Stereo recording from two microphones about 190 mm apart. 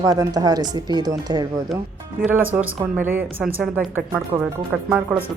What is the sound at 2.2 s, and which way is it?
A woman's voice, 10° right (ahead or behind).